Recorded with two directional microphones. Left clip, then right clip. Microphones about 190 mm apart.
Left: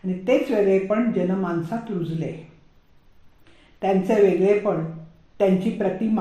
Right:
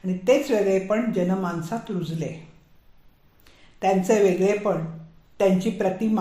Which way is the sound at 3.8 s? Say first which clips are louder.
Right 1 dB; 20° right (ahead or behind).